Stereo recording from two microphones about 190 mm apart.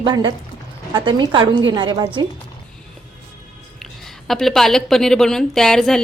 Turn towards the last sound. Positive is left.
turn(degrees=0)  # may be behind; listen again after turning